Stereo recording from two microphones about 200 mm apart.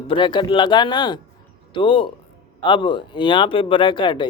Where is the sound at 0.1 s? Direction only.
25° left (ahead or behind).